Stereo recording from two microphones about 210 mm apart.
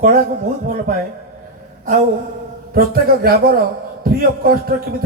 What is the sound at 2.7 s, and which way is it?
A man's voice, 45° right (ahead or behind).